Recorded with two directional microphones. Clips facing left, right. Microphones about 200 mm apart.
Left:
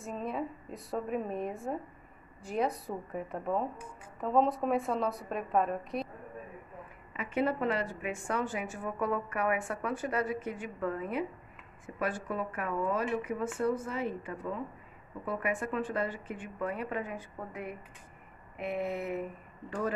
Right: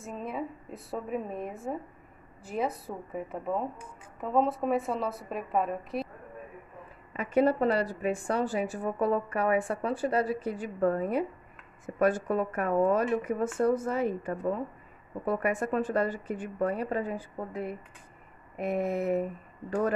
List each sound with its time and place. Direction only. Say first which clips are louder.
0.0 s a woman's voice: even; centre (ahead or behind)
7.2 s a woman's voice: right 6 dB; 40° right (ahead or behind)